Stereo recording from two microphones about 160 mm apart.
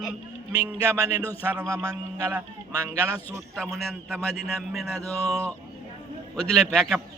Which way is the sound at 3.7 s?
Centre (ahead or behind).